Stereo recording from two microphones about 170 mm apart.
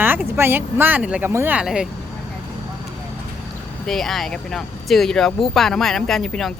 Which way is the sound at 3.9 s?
Centre (ahead or behind).